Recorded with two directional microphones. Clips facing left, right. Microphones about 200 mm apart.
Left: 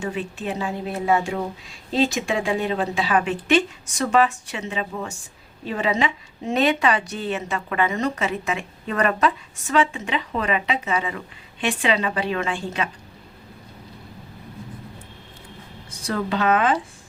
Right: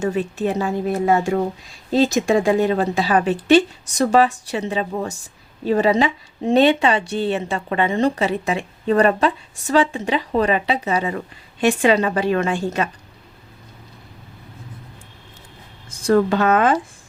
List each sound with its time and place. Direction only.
0.0 s speech: 45° right (ahead or behind)
15.9 s speech: 50° right (ahead or behind)